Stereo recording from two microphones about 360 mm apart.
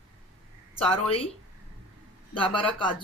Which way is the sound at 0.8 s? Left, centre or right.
Centre.